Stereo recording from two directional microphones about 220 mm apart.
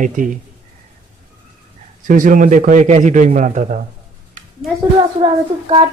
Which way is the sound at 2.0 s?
35° right (ahead or behind).